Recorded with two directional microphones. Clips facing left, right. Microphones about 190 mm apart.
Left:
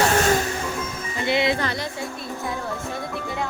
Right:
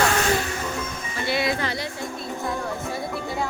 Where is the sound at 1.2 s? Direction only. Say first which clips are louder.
Left 3 dB; 20° left (ahead or behind).